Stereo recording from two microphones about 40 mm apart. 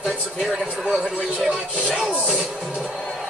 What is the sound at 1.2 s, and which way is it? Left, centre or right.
Speech, centre.